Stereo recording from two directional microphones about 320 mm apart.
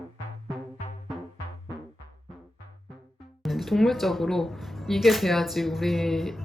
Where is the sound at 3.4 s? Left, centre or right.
Centre.